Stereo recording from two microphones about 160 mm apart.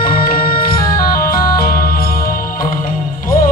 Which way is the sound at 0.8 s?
25° left (ahead or behind).